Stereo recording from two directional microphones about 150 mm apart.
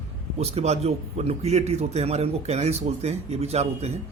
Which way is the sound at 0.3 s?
45° right (ahead or behind).